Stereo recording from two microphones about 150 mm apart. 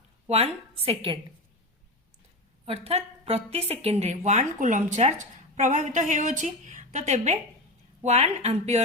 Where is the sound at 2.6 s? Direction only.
40° right (ahead or behind).